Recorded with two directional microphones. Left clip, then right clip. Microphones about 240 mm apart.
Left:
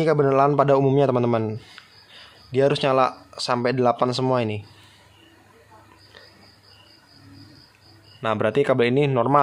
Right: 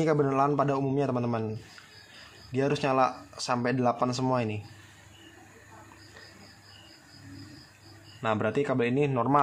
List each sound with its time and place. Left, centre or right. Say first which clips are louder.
0.0 s a man's voice: left 7 dB; left
2.5 s a man's voice: left 8 dB; centre
8.2 s a man's voice: left 7 dB; centre